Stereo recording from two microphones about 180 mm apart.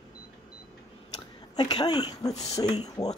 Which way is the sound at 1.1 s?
25° left (ahead or behind).